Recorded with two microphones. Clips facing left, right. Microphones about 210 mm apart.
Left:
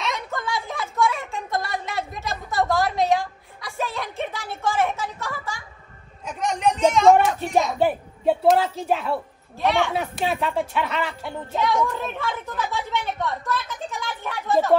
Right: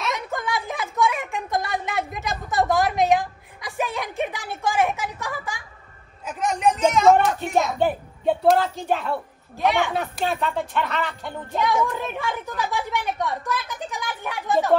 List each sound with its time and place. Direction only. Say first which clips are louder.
0.3 s a sound: right 1 dB; 15° right (ahead or behind)
6.2 s a woman's voice: right 1 dB; centre (ahead or behind)
12.7 s speech: right 2 dB; 15° right (ahead or behind)
14.5 s a woman's voice: left 1 dB; centre (ahead or behind)